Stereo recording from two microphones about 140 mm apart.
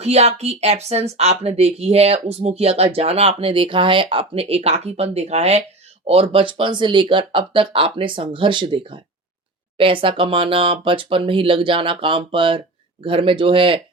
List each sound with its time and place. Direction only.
0.0 s speech: 50° right (ahead or behind)
6.3 s speech: 35° right (ahead or behind)